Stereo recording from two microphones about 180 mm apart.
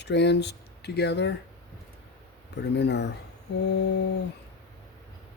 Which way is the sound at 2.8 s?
70° left (ahead or behind).